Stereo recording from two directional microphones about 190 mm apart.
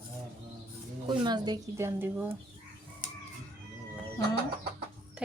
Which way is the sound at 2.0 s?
10° right (ahead or behind).